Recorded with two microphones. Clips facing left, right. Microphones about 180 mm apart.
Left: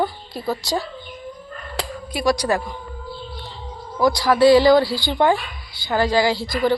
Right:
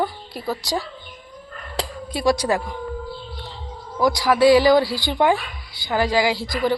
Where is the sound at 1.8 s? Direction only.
25° right (ahead or behind).